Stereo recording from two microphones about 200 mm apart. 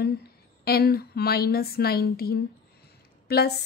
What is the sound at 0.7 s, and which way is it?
A woman's voice, 50° left (ahead or behind).